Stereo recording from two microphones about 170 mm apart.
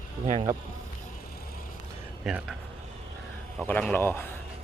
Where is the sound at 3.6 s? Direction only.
5° left (ahead or behind).